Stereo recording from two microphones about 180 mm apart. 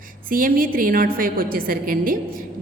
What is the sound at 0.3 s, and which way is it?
A woman's voice, 50° right (ahead or behind).